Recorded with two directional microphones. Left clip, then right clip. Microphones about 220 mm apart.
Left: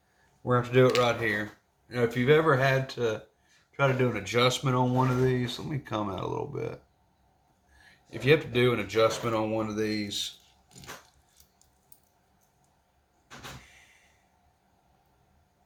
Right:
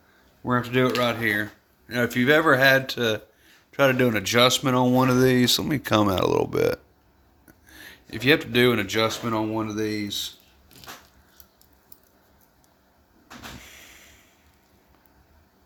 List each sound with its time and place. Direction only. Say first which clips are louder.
0.4 s speech: even; 45° right (ahead or behind)
7.8 s speech: right 6 dB; 60° right (ahead or behind)
9.6 s speech: right 3 dB; 45° right (ahead or behind)